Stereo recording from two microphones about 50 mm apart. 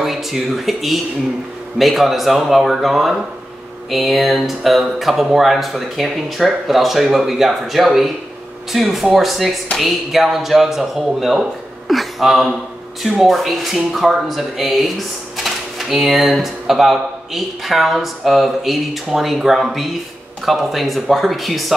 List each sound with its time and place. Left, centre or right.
0.0 s speech: centre